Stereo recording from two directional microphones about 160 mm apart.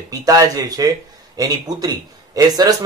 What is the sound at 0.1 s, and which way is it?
Speech, 25° right (ahead or behind).